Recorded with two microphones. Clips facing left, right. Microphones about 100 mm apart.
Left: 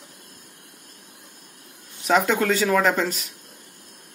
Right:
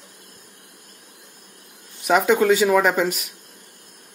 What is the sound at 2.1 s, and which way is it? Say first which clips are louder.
Speech: right 3 dB; 5° right (ahead or behind).